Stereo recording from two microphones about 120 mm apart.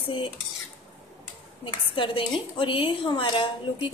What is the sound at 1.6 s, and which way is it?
A woman's voice, 45° left (ahead or behind).